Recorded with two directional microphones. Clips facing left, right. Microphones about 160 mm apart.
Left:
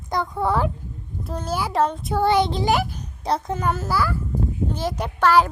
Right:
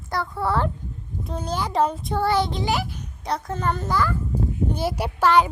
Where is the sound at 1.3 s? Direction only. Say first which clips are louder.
Left 1 dB; 5° left (ahead or behind).